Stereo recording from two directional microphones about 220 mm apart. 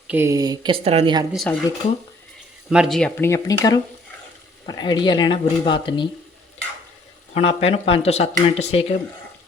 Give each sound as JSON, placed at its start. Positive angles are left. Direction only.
{"t": 0.1, "sound": "speech", "side_deg": -10}
{"t": 1.3, "sound": "speech", "side_deg": 0}
{"t": 2.6, "sound": "speech", "side_deg": 0}
{"t": 7.3, "sound": "speech", "side_deg": 30}